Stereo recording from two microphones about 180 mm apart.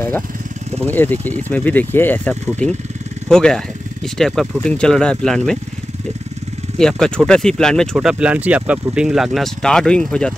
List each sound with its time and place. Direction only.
0.8 s speech: 10° left (ahead or behind)
6.8 s speech: 5° left (ahead or behind)